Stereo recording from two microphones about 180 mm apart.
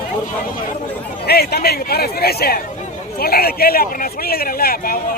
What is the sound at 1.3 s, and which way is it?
A man's voice, 60° left (ahead or behind).